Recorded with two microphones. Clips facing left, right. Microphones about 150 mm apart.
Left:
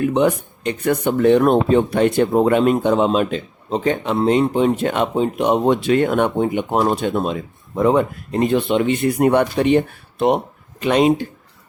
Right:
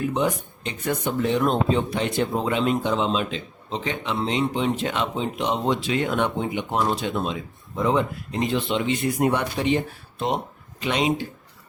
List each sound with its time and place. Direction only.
0.0 s speech: 65° left (ahead or behind)
10.8 s speech: 50° left (ahead or behind)